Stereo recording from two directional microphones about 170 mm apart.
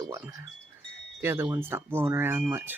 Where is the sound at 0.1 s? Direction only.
20° right (ahead or behind).